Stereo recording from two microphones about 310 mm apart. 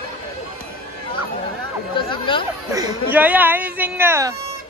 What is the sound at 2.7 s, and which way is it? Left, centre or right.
Speech, centre.